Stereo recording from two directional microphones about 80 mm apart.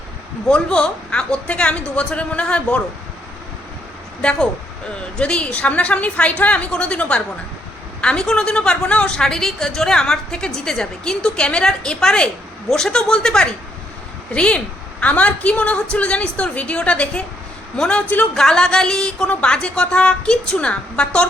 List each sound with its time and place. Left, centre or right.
0.4 s a woman's voice: centre
4.2 s a woman's voice: centre